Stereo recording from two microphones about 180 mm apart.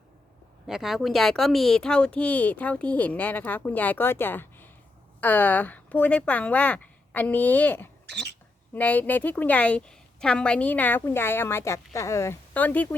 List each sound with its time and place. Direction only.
0.7 s speech: centre (ahead or behind)
8.0 s cough: 70° right (ahead or behind)
8.7 s speech: 10° left (ahead or behind)